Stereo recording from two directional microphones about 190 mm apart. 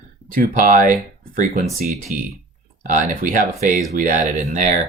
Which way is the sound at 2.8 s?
45° right (ahead or behind).